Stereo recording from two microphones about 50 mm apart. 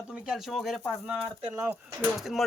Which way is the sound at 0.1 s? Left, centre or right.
Centre.